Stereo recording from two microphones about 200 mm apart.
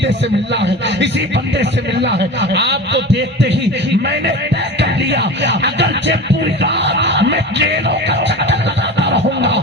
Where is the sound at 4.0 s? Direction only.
60° right (ahead or behind).